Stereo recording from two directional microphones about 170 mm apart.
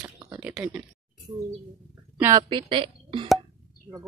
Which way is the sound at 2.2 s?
15° right (ahead or behind).